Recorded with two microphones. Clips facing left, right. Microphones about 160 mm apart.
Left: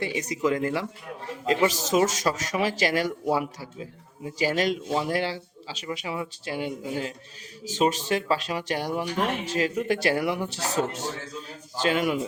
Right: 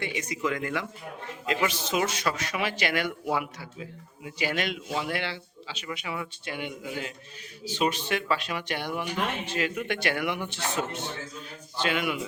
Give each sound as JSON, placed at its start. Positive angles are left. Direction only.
{"t": 0.0, "sound": "speech", "side_deg": 35}